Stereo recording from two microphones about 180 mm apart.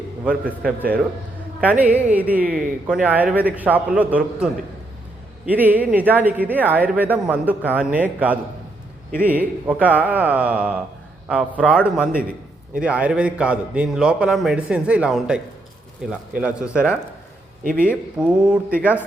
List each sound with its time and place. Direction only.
0.8 s a man's voice: 10° right (ahead or behind)
5.5 s a man's voice: 10° right (ahead or behind)
17.6 s a man's voice: 50° right (ahead or behind)
17.8 s a man's voice: 5° right (ahead or behind)